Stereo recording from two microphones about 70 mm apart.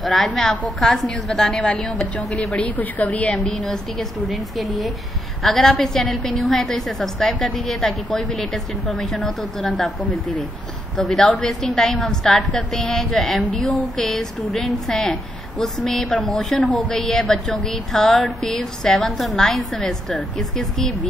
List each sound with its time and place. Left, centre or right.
0.0 s a woman's voice: centre
2.8 s a woman's voice: left
3.4 s a woman's voice: centre
11.0 s a woman's voice: centre
16.5 s a woman's voice: centre